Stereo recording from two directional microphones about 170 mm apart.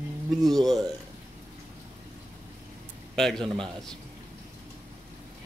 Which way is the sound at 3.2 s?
5° left (ahead or behind).